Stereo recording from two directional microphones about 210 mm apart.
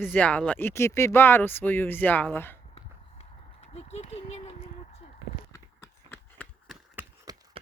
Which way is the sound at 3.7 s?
30° left (ahead or behind).